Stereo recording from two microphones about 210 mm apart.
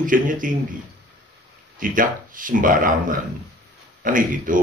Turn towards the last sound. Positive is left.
turn(degrees=-40)  # may be behind; listen again after turning